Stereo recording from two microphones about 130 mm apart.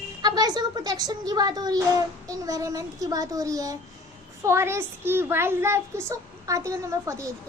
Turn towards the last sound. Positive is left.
turn(degrees=-25)  # may be behind; listen again after turning